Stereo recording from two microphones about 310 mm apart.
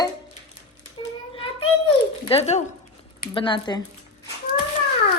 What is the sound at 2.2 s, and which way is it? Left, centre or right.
Speech, centre.